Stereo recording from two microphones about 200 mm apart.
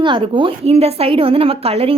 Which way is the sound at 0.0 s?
25° right (ahead or behind).